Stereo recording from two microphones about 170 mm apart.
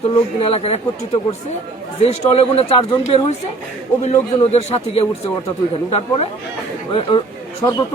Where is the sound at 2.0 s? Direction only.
35° left (ahead or behind).